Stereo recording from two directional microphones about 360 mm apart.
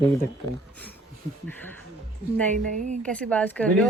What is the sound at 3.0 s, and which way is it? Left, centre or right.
Speech, centre.